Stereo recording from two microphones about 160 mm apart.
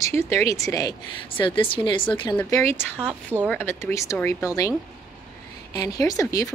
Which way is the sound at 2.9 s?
10° right (ahead or behind).